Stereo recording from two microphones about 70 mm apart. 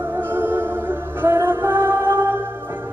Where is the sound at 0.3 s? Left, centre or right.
Right.